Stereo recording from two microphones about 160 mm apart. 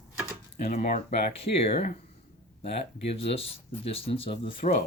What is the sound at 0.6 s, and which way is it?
Speech, 50° left (ahead or behind).